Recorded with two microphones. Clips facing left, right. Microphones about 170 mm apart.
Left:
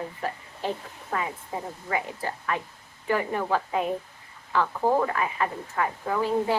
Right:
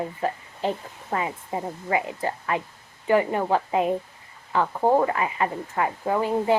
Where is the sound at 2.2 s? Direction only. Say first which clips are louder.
Right 3 dB; 20° right (ahead or behind).